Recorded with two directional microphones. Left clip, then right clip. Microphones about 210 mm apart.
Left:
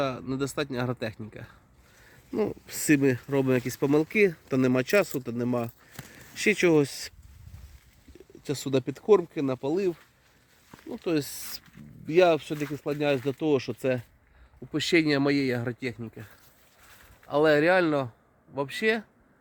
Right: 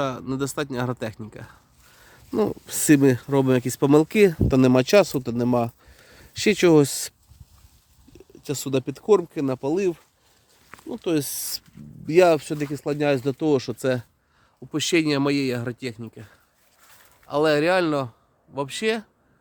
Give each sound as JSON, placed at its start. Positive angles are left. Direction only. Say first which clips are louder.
{"t": 0.0, "sound": "speech", "louder": "right 3 dB", "side_deg": -15}
{"t": 2.3, "sound": "speech", "louder": "right 5 dB", "side_deg": -30}
{"t": 8.4, "sound": "speech", "louder": "right 2 dB", "side_deg": -10}
{"t": 14.7, "sound": "speech", "louder": "right 2 dB", "side_deg": -15}